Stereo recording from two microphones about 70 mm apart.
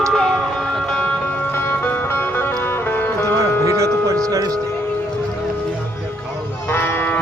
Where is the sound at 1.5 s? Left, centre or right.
Left.